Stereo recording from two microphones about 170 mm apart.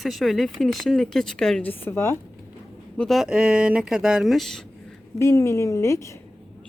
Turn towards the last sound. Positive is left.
turn(degrees=15)  # may be behind; listen again after turning